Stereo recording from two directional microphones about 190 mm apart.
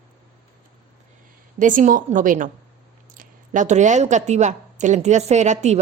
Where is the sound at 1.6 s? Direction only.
45° right (ahead or behind).